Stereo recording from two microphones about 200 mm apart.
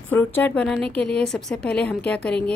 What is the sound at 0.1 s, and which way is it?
A woman's voice, 10° left (ahead or behind).